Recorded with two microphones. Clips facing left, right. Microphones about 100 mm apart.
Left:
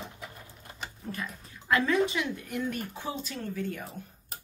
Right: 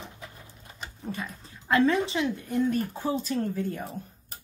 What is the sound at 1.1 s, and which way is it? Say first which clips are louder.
Speech: right 3 dB; 25° right (ahead or behind).